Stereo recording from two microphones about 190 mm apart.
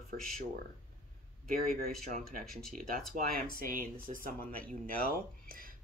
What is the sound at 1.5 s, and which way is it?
Speech, 50° right (ahead or behind).